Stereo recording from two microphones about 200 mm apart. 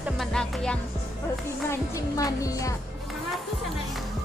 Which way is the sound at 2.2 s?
15° left (ahead or behind).